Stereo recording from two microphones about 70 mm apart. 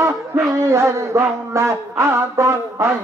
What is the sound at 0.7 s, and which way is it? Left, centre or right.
Mantra, right.